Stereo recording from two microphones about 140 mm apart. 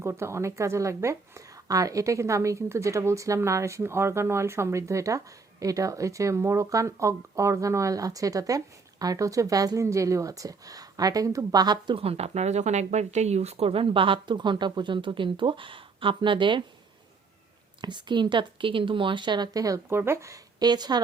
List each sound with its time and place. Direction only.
0.0 s speech: 20° right (ahead or behind); by 16.6 s 35° right (ahead or behind)
17.7 s speech: 35° right (ahead or behind)